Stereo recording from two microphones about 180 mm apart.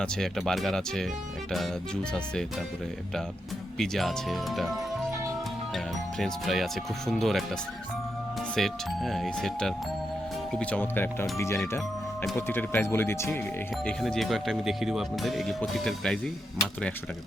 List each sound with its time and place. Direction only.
0.0 s speech: 5° left (ahead or behind)
3.8 s speech: centre (ahead or behind)
8.5 s speech: centre (ahead or behind)
13.8 s speech: centre (ahead or behind)